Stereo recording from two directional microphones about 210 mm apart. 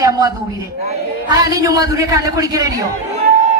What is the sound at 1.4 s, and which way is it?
A man's voice, 15° right (ahead or behind).